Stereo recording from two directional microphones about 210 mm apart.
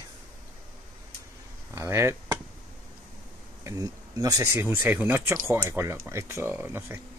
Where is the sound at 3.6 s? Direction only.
15° right (ahead or behind).